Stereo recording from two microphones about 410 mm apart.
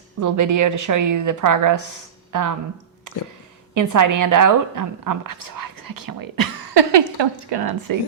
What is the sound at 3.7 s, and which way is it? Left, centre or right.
A woman's voice, right.